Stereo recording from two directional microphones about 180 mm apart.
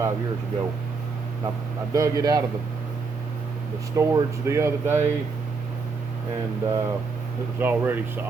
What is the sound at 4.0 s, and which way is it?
Speech, 15° right (ahead or behind).